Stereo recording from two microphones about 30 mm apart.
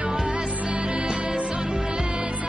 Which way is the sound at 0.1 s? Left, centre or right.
Right.